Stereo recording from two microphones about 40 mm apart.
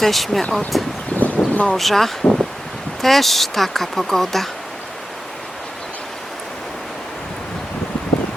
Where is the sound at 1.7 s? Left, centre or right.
Centre.